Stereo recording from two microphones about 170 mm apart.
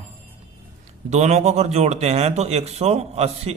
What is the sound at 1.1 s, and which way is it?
Speech, 40° right (ahead or behind).